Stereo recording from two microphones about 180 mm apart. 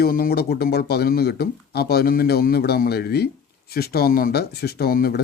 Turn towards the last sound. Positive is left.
turn(degrees=55)  # may be behind; listen again after turning